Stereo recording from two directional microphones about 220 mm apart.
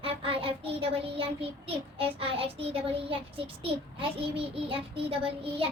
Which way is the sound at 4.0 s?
25° right (ahead or behind).